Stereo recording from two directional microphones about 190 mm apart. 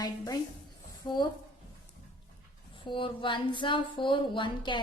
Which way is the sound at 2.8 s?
25° left (ahead or behind).